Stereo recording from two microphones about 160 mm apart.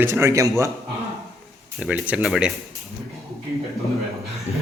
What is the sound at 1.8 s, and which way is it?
Speech, 10° right (ahead or behind).